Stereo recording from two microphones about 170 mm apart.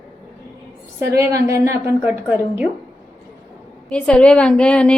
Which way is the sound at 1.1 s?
20° right (ahead or behind).